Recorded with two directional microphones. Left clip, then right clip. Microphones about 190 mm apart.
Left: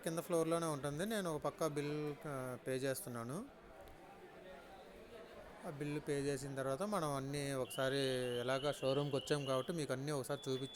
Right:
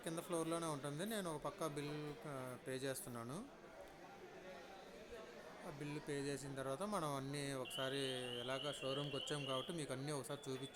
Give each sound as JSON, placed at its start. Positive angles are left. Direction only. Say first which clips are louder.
{"t": 0.0, "sound": "speech", "louder": "left 6 dB", "side_deg": 20}
{"t": 5.8, "sound": "speech", "louder": "left 6 dB", "side_deg": 20}